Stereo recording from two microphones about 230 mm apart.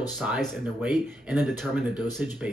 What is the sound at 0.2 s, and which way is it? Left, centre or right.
Speech, centre.